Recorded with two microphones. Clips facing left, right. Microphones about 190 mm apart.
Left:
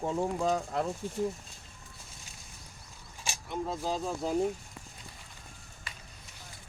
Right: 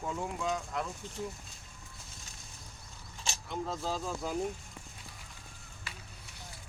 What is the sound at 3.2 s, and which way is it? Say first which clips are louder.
Speech: left 2 dB; 10° left (ahead or behind).